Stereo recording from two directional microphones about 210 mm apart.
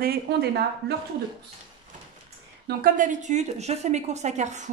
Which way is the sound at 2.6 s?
40° right (ahead or behind).